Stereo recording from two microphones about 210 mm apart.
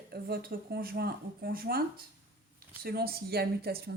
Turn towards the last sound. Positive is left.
turn(degrees=-50)  # may be behind; listen again after turning